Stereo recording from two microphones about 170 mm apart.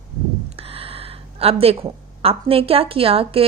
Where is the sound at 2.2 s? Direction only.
35° right (ahead or behind).